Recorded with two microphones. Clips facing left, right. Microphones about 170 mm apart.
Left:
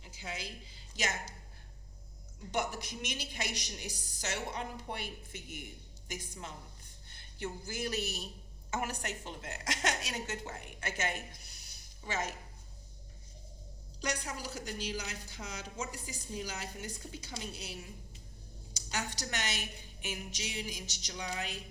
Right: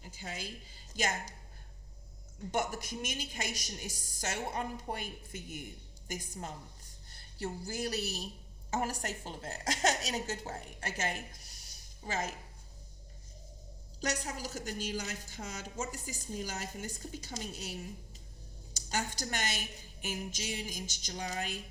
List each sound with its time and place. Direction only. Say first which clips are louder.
0.0 s a woman's voice: even; 45° right (ahead or behind)
2.5 s a woman's voice: right 1 dB; 45° right (ahead or behind)
14.0 s a woman's voice: right 1 dB; 45° right (ahead or behind)